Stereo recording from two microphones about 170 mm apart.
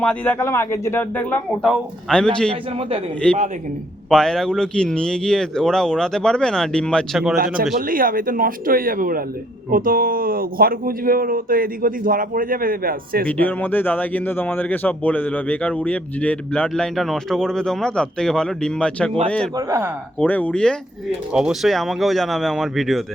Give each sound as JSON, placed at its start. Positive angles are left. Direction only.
{"t": 0.0, "sound": "speech", "side_deg": 10}
{"t": 1.6, "sound": "a man's voice", "side_deg": 0}
{"t": 7.3, "sound": "speech", "side_deg": -60}
{"t": 13.2, "sound": "a man's voice", "side_deg": 10}
{"t": 19.5, "sound": "speech", "side_deg": -20}
{"t": 20.1, "sound": "a man's voice", "side_deg": 10}